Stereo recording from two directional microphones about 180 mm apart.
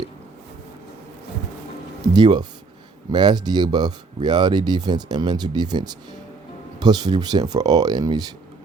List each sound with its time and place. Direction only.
2.1 s speech: 25° right (ahead or behind)